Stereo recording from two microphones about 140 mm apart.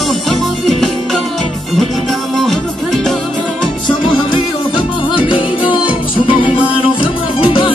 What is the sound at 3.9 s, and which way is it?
Music, 35° left (ahead or behind).